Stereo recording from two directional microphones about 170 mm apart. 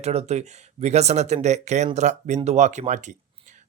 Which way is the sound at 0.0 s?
40° right (ahead or behind).